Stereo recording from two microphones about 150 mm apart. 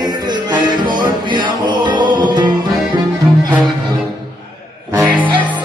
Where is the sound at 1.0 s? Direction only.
30° right (ahead or behind).